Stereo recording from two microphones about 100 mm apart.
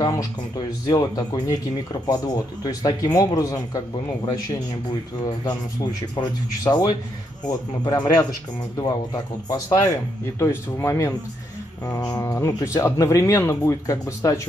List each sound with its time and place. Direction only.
0.0 s speech: 40° left (ahead or behind)
6.6 s speech: 40° left (ahead or behind)
11.8 s speech: 40° left (ahead or behind)
12.2 s speech: 25° left (ahead or behind)